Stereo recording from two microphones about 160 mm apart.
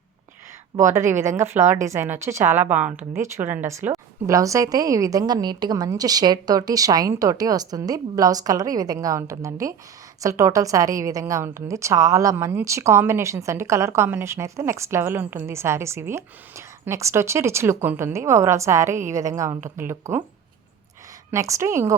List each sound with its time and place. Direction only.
1.4 s a woman's voice: 15° right (ahead or behind)
21.2 s a woman's voice: 20° right (ahead or behind)